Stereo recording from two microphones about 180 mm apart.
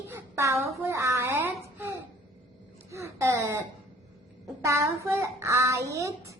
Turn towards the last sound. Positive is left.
turn(degrees=-20)  # may be behind; listen again after turning